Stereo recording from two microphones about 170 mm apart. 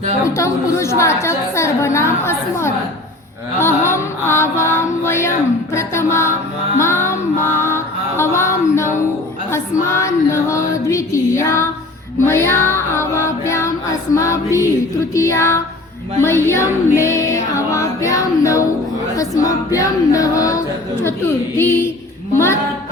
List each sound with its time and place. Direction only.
0.3 s a woman's voice: 15° left (ahead or behind)
3.6 s music: 15° left (ahead or behind)
5.7 s a woman's voice: 15° left (ahead or behind)
6.7 s music: 15° left (ahead or behind)
9.5 s female singing: 15° left (ahead or behind)
12.2 s music: 15° left (ahead or behind)
14.2 s a woman's voice: 20° left (ahead or behind)
15.1 s child singing: 20° left (ahead or behind)
16.2 s music: 15° left (ahead or behind)